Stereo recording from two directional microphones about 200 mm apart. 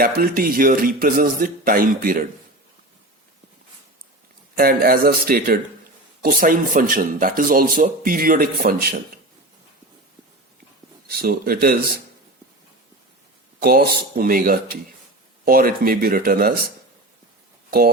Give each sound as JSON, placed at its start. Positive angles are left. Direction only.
{"t": 0.0, "sound": "speech", "side_deg": -45}
{"t": 4.5, "sound": "speech", "side_deg": -45}
{"t": 11.1, "sound": "speech", "side_deg": -50}
{"t": 13.6, "sound": "speech", "side_deg": -50}
{"t": 17.7, "sound": "speech", "side_deg": -50}